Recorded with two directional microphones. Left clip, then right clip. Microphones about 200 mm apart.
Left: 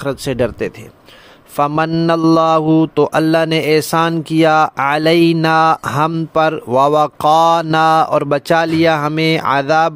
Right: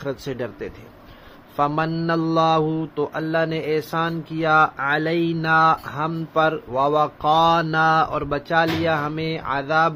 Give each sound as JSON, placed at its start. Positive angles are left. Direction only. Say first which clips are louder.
{"t": 0.0, "sound": "speech", "louder": "left 10 dB", "side_deg": 45}
{"t": 1.6, "sound": "mantra", "louder": "left 7 dB", "side_deg": 50}